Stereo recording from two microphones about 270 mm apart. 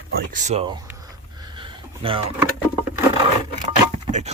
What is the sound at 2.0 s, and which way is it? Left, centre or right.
Speech, centre.